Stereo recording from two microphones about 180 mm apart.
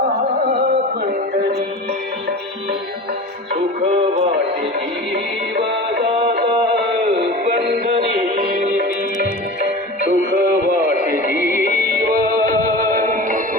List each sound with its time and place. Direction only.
6.7 s a sound: 65° right (ahead or behind)
10.1 s radio: 60° right (ahead or behind)
11.3 s music: 10° right (ahead or behind)
11.9 s music: 55° right (ahead or behind)